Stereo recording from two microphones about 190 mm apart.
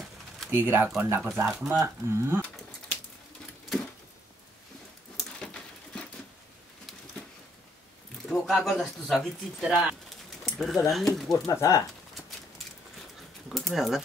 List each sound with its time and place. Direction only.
0.5 s speech: 10° right (ahead or behind)
5.4 s a sound: 5° left (ahead or behind)
8.3 s speech: centre (ahead or behind)
10.4 s bird: centre (ahead or behind)
10.9 s speech: centre (ahead or behind)
11.3 s speech: 15° left (ahead or behind)
13.5 s speech: centre (ahead or behind)